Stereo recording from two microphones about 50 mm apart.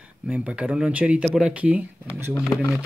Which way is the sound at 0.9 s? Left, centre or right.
Right.